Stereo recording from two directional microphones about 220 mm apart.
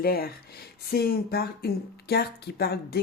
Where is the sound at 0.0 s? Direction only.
45° left (ahead or behind).